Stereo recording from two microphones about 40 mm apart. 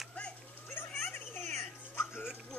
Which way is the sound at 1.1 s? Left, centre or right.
Left.